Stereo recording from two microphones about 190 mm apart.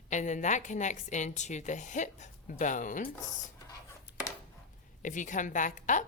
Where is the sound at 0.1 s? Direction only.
40° left (ahead or behind).